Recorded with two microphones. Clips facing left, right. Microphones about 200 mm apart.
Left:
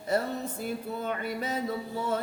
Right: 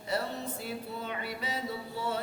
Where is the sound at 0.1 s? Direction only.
45° left (ahead or behind).